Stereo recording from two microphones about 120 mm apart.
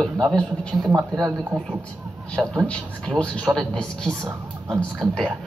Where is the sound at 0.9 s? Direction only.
25° right (ahead or behind).